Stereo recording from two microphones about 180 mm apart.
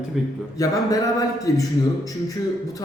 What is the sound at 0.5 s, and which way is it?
Speech, 20° left (ahead or behind).